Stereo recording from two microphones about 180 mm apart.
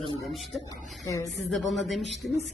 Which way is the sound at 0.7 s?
20° left (ahead or behind).